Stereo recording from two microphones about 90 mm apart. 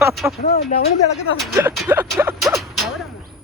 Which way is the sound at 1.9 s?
20° right (ahead or behind).